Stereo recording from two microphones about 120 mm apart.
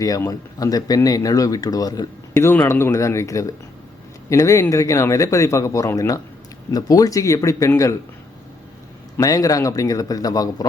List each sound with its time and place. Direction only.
0.0 s speech: 30° left (ahead or behind)
2.3 s a man's voice: 20° left (ahead or behind)
9.1 s a man's voice: 30° left (ahead or behind)